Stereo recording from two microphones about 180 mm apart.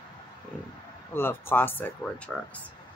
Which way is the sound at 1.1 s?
10° left (ahead or behind).